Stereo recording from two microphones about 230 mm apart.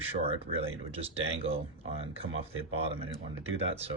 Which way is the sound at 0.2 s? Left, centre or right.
Right.